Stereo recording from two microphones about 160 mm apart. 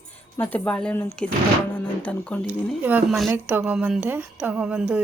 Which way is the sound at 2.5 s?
10° right (ahead or behind).